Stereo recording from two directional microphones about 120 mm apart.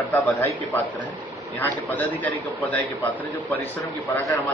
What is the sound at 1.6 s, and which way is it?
Speech, 15° left (ahead or behind).